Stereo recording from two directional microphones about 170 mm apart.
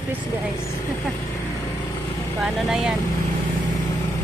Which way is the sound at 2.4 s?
5° right (ahead or behind).